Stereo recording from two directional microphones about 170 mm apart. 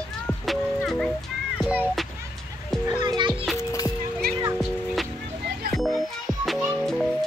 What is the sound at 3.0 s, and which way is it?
Music, 25° right (ahead or behind).